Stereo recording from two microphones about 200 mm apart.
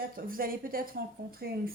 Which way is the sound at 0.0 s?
45° right (ahead or behind).